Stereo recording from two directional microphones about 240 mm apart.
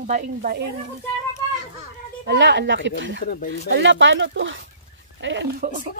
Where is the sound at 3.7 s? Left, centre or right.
Right.